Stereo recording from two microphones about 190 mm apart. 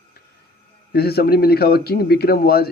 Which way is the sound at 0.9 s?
55° left (ahead or behind).